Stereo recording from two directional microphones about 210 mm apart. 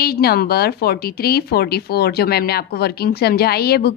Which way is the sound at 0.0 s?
50° left (ahead or behind).